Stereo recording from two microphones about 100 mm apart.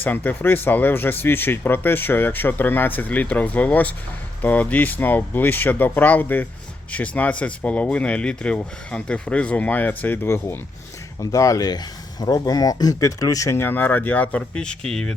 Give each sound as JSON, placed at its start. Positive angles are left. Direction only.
{"t": 0.0, "sound": "speech", "side_deg": 15}
{"t": 11.2, "sound": "speech", "side_deg": 35}